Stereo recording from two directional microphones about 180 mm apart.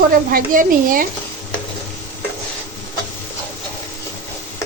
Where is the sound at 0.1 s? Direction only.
55° right (ahead or behind).